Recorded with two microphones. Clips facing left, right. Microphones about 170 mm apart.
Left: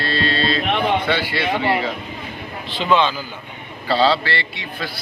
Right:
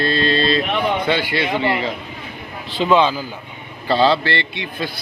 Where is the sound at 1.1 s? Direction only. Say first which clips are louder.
Right 2 dB; 20° right (ahead or behind).